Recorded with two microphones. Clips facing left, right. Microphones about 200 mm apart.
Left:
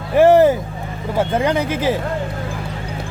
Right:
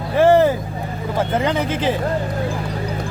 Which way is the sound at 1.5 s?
15° left (ahead or behind).